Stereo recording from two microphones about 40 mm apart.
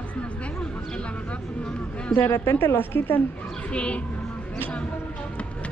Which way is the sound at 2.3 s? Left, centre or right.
Left.